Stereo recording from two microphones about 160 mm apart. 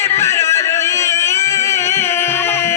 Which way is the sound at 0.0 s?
15° left (ahead or behind).